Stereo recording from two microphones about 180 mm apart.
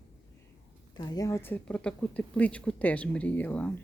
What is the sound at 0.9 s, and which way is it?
A woman's voice, 20° left (ahead or behind).